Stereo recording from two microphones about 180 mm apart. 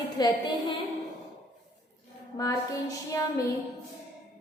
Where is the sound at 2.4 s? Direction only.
20° left (ahead or behind).